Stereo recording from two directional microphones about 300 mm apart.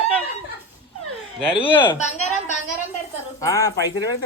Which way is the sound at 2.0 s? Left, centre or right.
Left.